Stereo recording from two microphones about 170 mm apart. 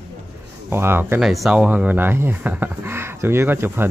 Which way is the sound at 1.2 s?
Centre (ahead or behind).